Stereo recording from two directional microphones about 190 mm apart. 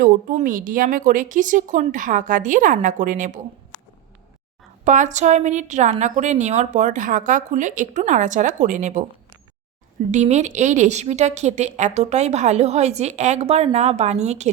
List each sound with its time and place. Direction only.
0.0 s a woman's voice: 45° right (ahead or behind)
4.9 s a woman's voice: 40° right (ahead or behind)
10.1 s a woman's voice: 35° right (ahead or behind)